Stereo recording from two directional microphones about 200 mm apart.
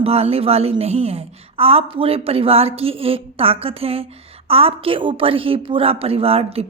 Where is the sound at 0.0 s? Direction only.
30° right (ahead or behind).